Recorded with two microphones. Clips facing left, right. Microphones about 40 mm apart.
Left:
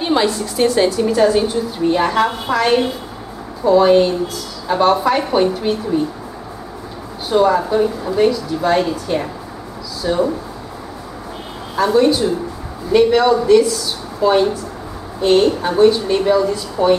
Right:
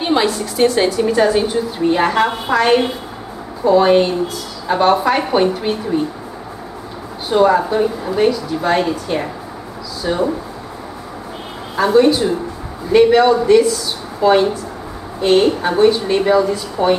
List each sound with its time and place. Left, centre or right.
0.0 s a woman's voice: centre
7.2 s a woman's voice: centre
11.7 s a woman's voice: centre